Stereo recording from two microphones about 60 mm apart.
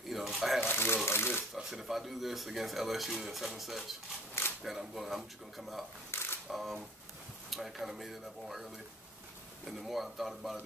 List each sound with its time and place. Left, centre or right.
0.1 s water: centre
0.7 s water: left
1.0 s typewriter: left
1.5 s speech: centre
6.1 s camera: left
6.5 s speech: centre